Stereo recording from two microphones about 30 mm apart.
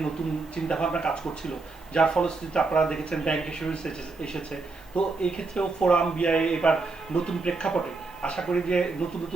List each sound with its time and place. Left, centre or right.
0.5 s a man's voice: left